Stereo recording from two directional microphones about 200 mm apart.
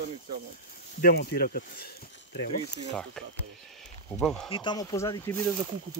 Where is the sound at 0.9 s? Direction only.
50° left (ahead or behind).